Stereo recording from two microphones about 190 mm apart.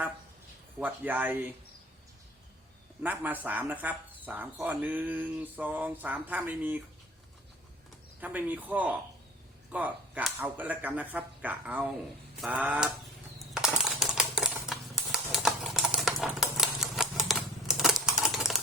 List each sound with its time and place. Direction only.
0.8 s speech: 10° right (ahead or behind)
3.0 s speech: 10° right (ahead or behind)
8.2 s speech: 10° right (ahead or behind)
12.4 s a sound: 5° right (ahead or behind)
13.5 s typewriter: 5° right (ahead or behind)